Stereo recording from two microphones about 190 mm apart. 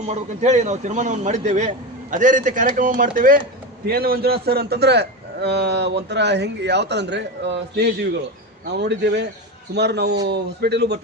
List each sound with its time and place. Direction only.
0.1 s a man's voice: 40° right (ahead or behind); by 11.0 s 60° right (ahead or behind)